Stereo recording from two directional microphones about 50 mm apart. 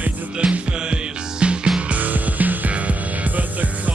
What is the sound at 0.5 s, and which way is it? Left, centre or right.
Music, right.